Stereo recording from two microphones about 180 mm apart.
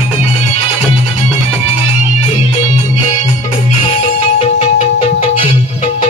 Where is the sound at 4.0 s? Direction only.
30° left (ahead or behind).